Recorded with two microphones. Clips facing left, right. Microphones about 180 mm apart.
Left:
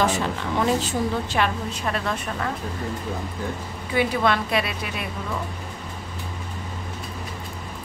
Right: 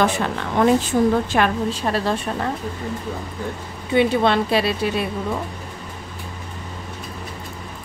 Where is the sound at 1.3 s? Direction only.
55° right (ahead or behind).